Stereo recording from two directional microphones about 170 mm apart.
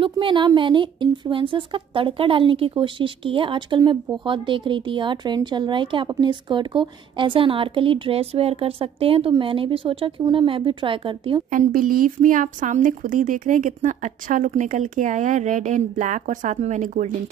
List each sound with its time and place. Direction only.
0.0 s a woman's voice: 30° right (ahead or behind)
11.5 s a woman's voice: 55° right (ahead or behind)